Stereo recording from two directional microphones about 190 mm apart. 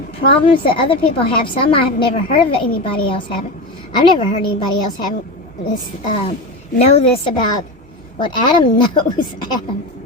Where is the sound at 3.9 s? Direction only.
25° left (ahead or behind).